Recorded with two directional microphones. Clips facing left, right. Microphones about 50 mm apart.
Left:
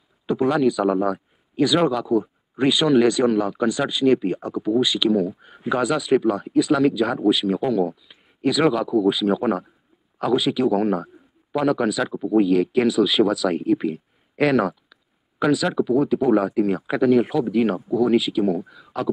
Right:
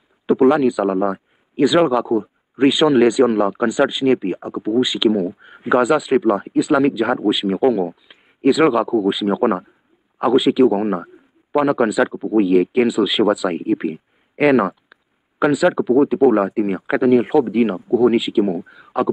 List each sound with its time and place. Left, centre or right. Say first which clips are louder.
0.3 s speech: right 5 dB; centre